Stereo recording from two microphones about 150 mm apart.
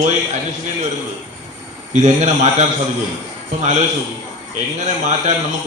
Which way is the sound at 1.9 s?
50° right (ahead or behind).